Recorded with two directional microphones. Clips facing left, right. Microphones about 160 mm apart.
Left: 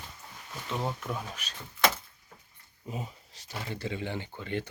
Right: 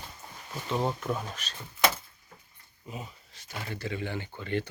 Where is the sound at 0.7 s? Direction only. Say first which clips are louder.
Right 4 dB; 30° right (ahead or behind).